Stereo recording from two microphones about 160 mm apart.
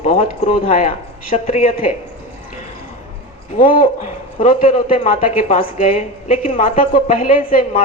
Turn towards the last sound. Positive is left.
turn(degrees=60)  # may be behind; listen again after turning